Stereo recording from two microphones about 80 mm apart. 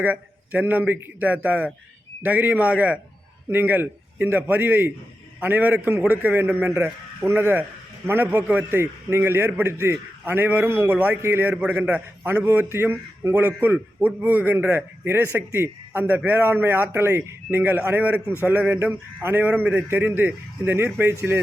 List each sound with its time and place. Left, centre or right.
0.0 s a man's voice: right
11.2 s a man's voice: right
11.5 s a man's voice: centre
12.6 s a man's voice: right
17.6 s a man's voice: right